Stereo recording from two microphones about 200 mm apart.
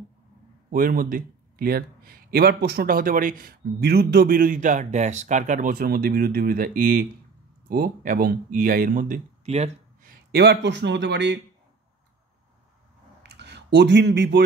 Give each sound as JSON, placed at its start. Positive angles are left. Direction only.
{"t": 0.7, "sound": "speech", "side_deg": -45}
{"t": 10.3, "sound": "speech", "side_deg": -55}
{"t": 13.2, "sound": "a sound", "side_deg": -60}